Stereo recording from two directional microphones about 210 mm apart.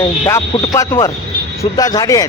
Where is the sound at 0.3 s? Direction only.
15° left (ahead or behind).